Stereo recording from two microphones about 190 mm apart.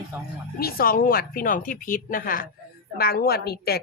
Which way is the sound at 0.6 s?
50° left (ahead or behind).